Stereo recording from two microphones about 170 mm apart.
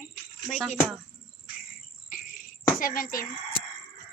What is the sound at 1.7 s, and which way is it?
Cricket, 55° left (ahead or behind).